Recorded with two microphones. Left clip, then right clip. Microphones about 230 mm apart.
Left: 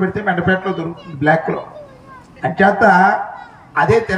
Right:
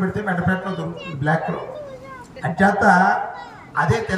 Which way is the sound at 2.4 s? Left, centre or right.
Left.